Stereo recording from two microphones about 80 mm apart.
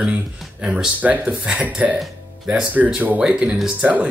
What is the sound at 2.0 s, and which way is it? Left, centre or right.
Music, centre.